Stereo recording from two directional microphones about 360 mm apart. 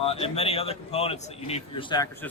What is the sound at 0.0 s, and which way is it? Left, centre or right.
A man's voice, centre.